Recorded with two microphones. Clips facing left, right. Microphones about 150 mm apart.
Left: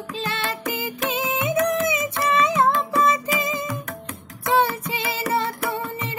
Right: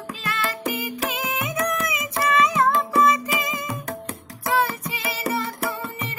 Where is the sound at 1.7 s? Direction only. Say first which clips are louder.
Left 5 dB; 30° left (ahead or behind).